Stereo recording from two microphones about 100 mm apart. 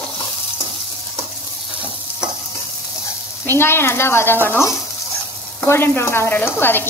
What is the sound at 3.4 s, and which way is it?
Speech, 25° left (ahead or behind).